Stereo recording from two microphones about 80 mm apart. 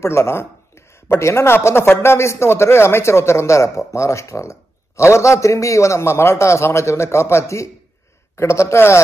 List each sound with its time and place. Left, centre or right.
0.0 s speech: left